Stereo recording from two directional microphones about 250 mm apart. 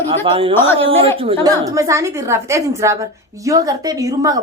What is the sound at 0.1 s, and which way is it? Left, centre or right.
A woman's voice, right.